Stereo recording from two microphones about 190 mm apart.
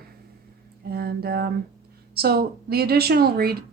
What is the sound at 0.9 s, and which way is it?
Speech, 55° right (ahead or behind).